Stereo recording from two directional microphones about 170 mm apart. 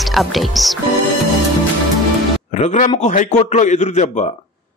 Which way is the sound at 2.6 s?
40° left (ahead or behind).